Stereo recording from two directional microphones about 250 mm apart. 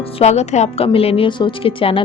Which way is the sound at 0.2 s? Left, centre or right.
Left.